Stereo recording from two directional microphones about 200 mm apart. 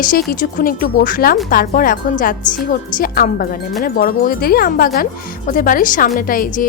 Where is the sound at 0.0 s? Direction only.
45° left (ahead or behind).